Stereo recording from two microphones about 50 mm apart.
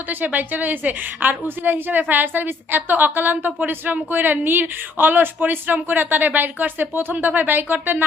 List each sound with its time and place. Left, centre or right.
0.3 s a woman's voice: right